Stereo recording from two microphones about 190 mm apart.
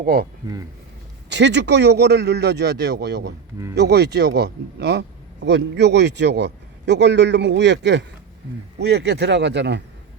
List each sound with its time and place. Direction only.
0.0 s speech: 50° right (ahead or behind)
1.3 s a man's voice: 65° right (ahead or behind)